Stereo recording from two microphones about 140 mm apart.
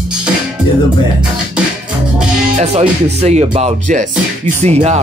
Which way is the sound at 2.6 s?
50° right (ahead or behind).